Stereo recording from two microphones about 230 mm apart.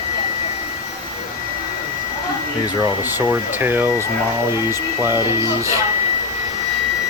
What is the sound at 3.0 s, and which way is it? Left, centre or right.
Speech, centre.